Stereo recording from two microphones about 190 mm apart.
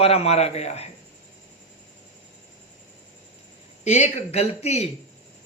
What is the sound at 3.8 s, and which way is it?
A woman's voice, 35° left (ahead or behind).